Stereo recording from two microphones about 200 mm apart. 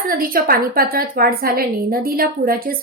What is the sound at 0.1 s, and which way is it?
A woman's voice, 45° right (ahead or behind).